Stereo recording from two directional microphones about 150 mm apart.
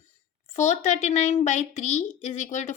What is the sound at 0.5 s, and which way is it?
A woman's voice, 55° left (ahead or behind).